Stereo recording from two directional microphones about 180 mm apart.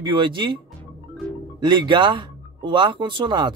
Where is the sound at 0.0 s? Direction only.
25° right (ahead or behind).